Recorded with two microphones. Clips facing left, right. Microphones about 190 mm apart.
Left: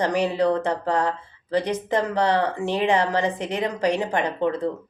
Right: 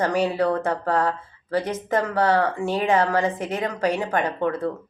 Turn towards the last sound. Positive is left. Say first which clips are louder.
# left 1 dB
turn(degrees=20)  # may be behind; listen again after turning